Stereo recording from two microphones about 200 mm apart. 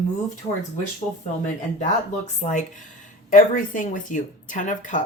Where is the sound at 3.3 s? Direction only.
40° left (ahead or behind).